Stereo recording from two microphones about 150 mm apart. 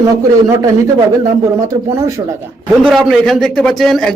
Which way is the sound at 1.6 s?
20° right (ahead or behind).